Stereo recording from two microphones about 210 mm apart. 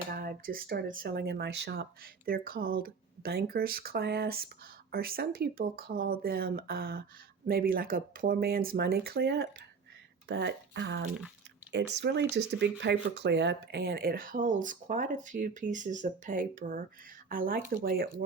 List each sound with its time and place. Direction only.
0.1 s speech: 45° right (ahead or behind)